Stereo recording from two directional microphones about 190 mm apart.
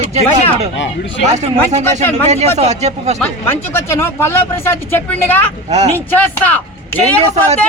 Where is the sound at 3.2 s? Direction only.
10° left (ahead or behind).